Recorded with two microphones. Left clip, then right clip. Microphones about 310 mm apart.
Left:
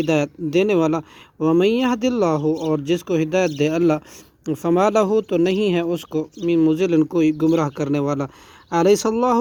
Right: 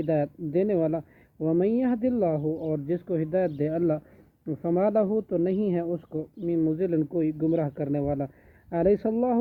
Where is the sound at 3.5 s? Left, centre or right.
Left.